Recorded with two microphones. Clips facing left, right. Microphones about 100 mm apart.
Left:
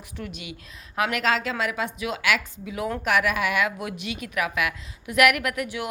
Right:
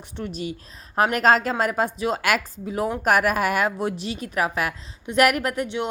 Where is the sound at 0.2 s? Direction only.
35° right (ahead or behind).